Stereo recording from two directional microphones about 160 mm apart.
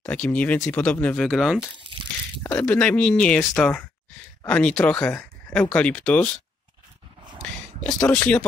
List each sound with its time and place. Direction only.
0.0 s speech: 10° left (ahead or behind)
1.8 s crumpling: 30° right (ahead or behind)
2.4 s speech: 10° left (ahead or behind)
7.8 s speech: 5° left (ahead or behind)